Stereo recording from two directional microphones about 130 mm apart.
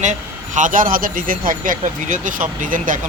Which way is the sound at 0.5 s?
85° right.